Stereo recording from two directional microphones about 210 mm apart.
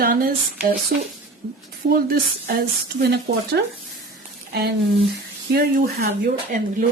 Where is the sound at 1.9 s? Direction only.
45° right (ahead or behind).